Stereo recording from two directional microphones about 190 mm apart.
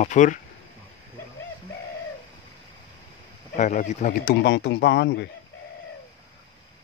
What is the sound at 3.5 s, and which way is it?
Speech, 40° left (ahead or behind).